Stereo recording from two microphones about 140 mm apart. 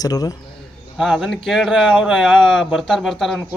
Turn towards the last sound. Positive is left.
turn(degrees=0)  # may be behind; listen again after turning